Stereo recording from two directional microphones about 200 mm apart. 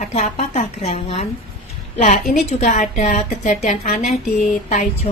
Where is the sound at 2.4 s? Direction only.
35° left (ahead or behind).